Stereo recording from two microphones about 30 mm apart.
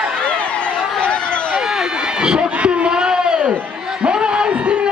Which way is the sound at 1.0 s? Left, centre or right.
Left.